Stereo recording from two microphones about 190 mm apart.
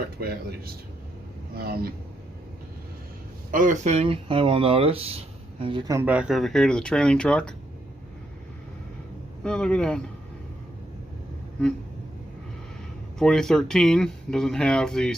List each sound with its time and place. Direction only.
0.2 s a man's voice: 55° right (ahead or behind)
3.5 s speech: 45° right (ahead or behind); by 7.5 s 5° left (ahead or behind)
9.4 s speech: 5° left (ahead or behind)
13.1 s speech: 5° left (ahead or behind)